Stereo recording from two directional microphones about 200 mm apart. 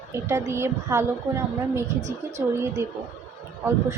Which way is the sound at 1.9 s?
35° right (ahead or behind).